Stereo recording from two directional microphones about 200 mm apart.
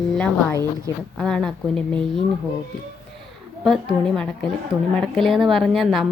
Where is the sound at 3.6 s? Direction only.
Centre (ahead or behind).